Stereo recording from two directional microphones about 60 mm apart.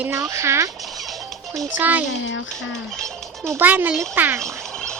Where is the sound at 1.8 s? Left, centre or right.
Right.